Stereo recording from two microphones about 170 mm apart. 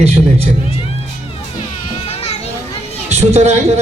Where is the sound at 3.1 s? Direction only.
40° right (ahead or behind).